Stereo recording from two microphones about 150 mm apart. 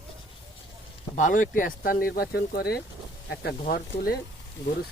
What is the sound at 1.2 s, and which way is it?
Speech, 60° left (ahead or behind).